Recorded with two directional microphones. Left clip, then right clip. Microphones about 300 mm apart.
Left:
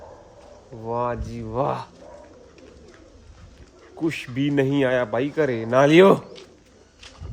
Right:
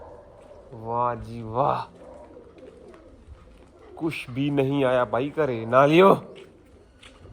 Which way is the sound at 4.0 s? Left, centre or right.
Centre.